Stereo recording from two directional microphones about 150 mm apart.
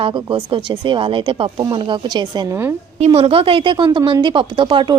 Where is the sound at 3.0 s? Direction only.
40° right (ahead or behind).